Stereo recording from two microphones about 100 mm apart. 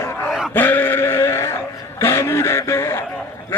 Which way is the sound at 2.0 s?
25° left (ahead or behind).